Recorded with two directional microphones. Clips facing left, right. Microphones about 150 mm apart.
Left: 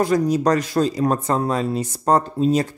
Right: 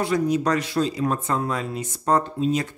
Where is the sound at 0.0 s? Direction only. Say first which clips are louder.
Left 4 dB; 40° left (ahead or behind).